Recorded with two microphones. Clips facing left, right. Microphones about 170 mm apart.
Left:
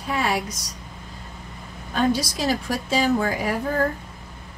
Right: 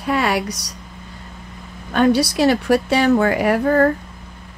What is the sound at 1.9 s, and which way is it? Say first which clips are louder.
Speech: right 7 dB; 70° right (ahead or behind).